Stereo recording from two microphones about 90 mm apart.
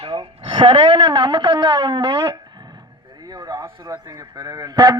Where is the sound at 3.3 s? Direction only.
40° right (ahead or behind).